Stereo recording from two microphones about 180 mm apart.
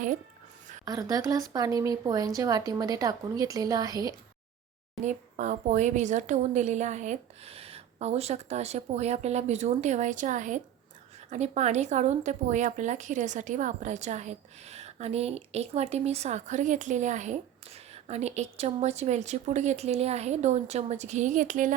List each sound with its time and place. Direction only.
0.9 s speech: 20° right (ahead or behind)
5.0 s a woman's voice: 40° right (ahead or behind)